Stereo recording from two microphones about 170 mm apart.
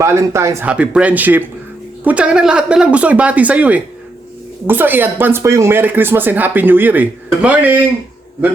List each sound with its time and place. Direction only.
0.0 s speech: 15° right (ahead or behind)
0.7 s speech: 5° right (ahead or behind)